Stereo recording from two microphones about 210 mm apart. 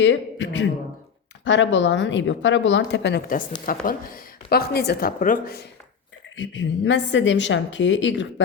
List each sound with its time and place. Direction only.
0.0 s speech: 60° left (ahead or behind); by 5.6 s 45° left (ahead or behind)
6.3 s speech: 60° left (ahead or behind)